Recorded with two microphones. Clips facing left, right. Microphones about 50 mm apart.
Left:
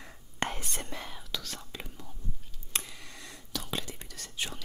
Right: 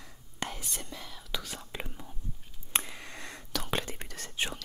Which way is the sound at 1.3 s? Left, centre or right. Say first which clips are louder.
Right 1 dB; centre.